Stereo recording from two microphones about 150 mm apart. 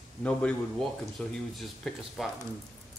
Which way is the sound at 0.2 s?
5° left (ahead or behind).